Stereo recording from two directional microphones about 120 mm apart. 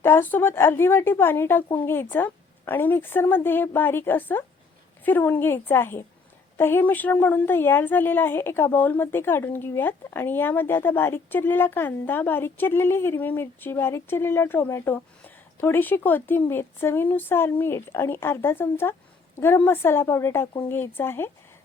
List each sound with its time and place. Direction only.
0.0 s a woman's voice: 20° left (ahead or behind)